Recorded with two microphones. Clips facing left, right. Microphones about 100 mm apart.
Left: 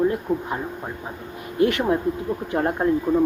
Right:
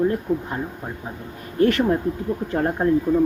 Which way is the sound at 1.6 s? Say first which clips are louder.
Right 2 dB; 15° left (ahead or behind).